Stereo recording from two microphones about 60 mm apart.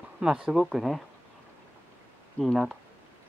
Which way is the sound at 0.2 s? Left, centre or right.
Centre.